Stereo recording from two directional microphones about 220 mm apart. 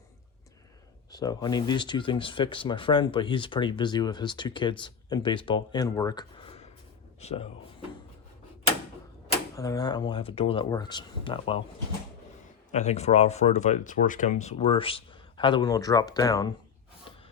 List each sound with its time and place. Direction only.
1.1 s speech: 20° left (ahead or behind)
9.6 s speech: 15° left (ahead or behind)
12.7 s speech: 30° left (ahead or behind)